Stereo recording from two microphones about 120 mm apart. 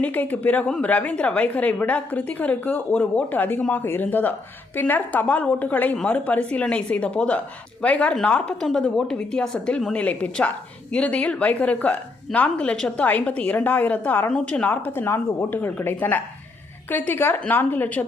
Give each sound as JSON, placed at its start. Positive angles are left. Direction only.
{"t": 0.0, "sound": "a woman's voice", "side_deg": 15}